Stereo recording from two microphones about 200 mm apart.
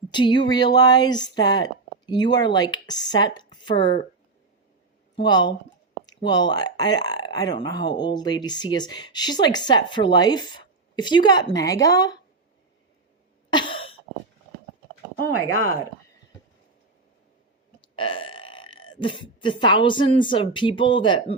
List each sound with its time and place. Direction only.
0.1 s speech: 20° left (ahead or behind)
5.1 s speech: 20° left (ahead or behind)
13.5 s cough: 25° left (ahead or behind)
17.7 s speech: 25° left (ahead or behind)